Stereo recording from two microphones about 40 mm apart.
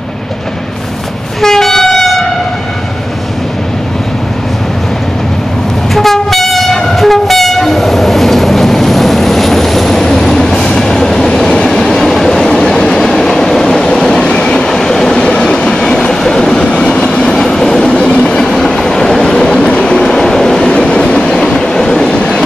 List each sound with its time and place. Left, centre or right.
1.4 s train: centre
5.9 s train: centre; by 17.4 s left
17.4 s train: centre
20.7 s train: left
21.0 s train: centre
22.1 s train: left